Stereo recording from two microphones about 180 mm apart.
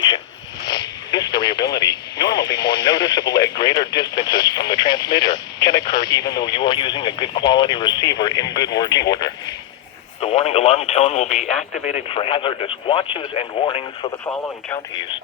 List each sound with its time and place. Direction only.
0.6 s radio: 20° left (ahead or behind)
1.7 s speech: 20° left (ahead or behind)
10.2 s speech: 35° left (ahead or behind)
14.3 s speech: 10° left (ahead or behind)